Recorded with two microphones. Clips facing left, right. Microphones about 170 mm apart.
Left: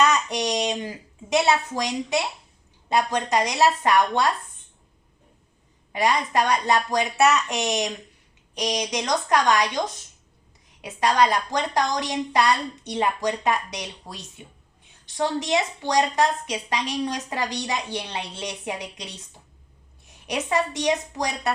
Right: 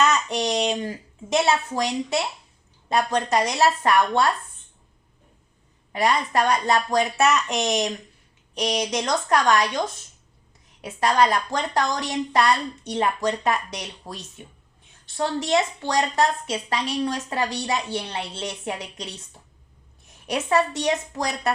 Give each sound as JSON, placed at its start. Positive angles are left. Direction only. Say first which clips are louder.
{"t": 0.0, "sound": "a sound", "louder": "even", "side_deg": 15}
{"t": 1.8, "sound": "a woman's voice", "louder": "right 1 dB", "side_deg": 15}
{"t": 5.9, "sound": "a woman's voice", "louder": "right 1 dB", "side_deg": 15}
{"t": 20.2, "sound": "a woman's voice", "louder": "right 3 dB", "side_deg": 15}